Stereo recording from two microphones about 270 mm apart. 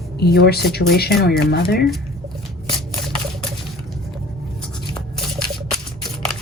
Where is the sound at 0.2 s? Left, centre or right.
Left.